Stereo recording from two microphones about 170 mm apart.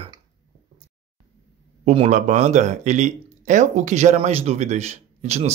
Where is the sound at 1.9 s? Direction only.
45° right (ahead or behind).